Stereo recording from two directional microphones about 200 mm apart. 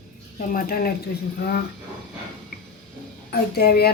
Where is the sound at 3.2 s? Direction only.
50° left (ahead or behind).